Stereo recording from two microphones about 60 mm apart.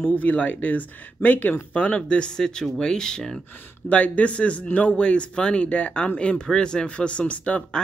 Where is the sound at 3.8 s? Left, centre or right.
Left.